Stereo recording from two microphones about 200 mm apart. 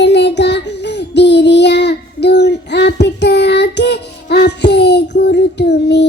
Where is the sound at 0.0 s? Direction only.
60° left (ahead or behind).